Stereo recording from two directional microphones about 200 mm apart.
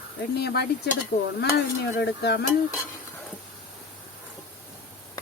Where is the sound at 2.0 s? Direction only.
55° left (ahead or behind).